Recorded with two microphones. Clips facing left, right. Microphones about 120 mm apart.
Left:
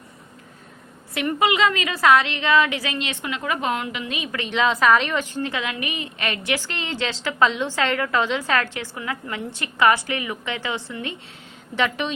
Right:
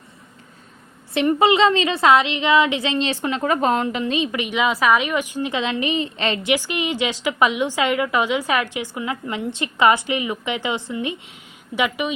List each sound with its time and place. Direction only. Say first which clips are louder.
1.1 s a woman's voice: right 5 dB; 25° right (ahead or behind)
4.4 s a woman's voice: left 2 dB; 10° right (ahead or behind)